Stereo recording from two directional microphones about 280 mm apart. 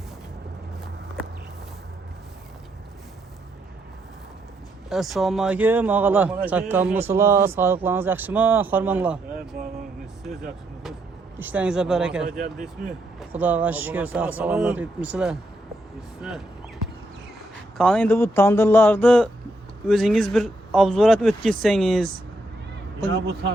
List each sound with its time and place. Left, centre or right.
4.9 s speech: centre
11.3 s speech: centre
17.7 s speech: centre
23.0 s speech: right